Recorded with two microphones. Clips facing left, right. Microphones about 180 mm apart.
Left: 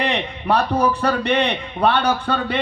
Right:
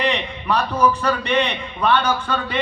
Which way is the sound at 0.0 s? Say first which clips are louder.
Even; 60° left (ahead or behind).